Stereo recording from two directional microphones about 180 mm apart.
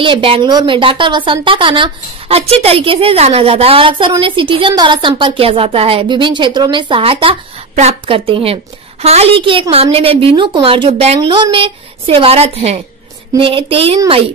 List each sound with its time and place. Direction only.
0.0 s a woman's voice: 30° right (ahead or behind)